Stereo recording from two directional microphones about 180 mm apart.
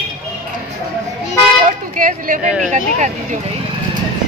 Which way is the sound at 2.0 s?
45° right (ahead or behind).